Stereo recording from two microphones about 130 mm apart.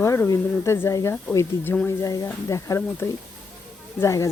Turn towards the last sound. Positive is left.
turn(degrees=20)  # may be behind; listen again after turning